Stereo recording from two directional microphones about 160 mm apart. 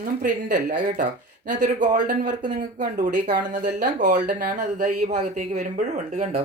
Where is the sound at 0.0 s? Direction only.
60° right (ahead or behind).